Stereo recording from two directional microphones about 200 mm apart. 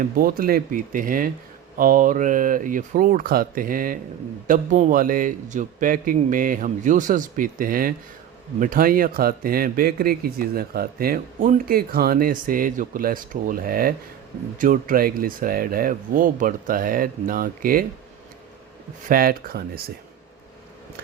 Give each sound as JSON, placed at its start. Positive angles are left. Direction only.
{"t": 0.2, "sound": "a man's voice", "side_deg": -50}
{"t": 19.0, "sound": "a man's voice", "side_deg": -45}